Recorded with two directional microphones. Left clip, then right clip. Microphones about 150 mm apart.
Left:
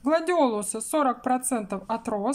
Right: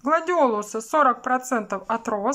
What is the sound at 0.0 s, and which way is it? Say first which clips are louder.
A woman's voice: right 3 dB; 30° left (ahead or behind).